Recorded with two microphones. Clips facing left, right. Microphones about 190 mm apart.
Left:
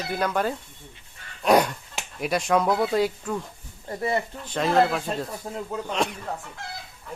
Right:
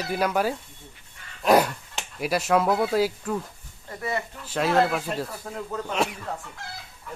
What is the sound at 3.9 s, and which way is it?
Speech, 30° left (ahead or behind).